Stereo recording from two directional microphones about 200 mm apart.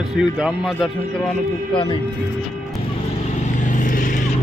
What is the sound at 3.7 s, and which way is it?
Vehicle, 40° left (ahead or behind).